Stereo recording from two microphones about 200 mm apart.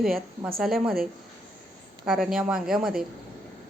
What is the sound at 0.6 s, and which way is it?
Speech, centre (ahead or behind).